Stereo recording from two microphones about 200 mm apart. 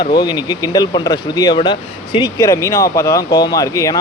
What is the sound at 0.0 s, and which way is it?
Speech, 20° left (ahead or behind).